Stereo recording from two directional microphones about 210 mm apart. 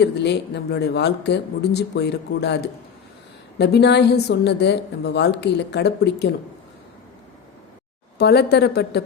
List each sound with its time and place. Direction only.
0.0 s a woman's voice: 55° left (ahead or behind)
8.2 s a woman's voice: 50° left (ahead or behind)